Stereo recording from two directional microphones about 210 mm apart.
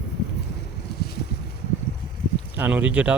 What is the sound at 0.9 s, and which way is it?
Boat, 50° left (ahead or behind).